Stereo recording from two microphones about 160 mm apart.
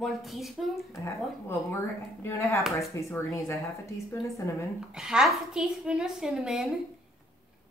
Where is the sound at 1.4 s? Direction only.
15° left (ahead or behind).